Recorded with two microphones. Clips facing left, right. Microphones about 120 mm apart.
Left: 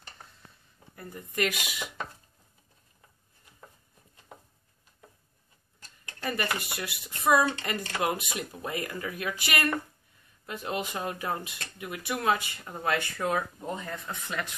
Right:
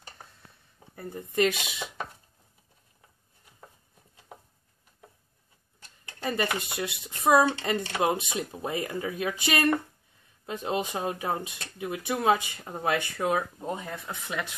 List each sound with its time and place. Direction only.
0.9 s speech: 25° right (ahead or behind)
6.1 s speech: 20° right (ahead or behind)
13.9 s speech: 5° right (ahead or behind)